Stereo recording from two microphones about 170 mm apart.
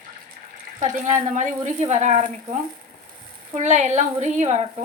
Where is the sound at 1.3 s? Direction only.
50° right (ahead or behind).